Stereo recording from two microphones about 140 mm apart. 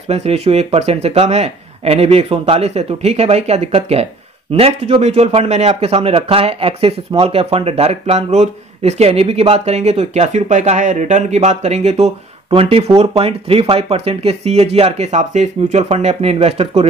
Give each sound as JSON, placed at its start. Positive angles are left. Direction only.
{"t": 0.1, "sound": "speech", "side_deg": -50}